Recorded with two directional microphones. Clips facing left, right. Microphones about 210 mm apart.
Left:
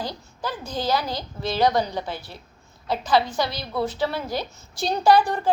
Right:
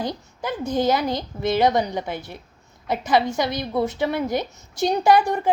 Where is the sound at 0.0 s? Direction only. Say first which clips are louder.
Right 3 dB; 20° right (ahead or behind).